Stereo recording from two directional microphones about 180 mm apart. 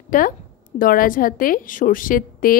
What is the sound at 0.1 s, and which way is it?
A woman's voice, 50° left (ahead or behind).